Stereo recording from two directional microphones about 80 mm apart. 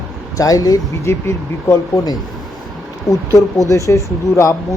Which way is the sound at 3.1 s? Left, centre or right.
Left.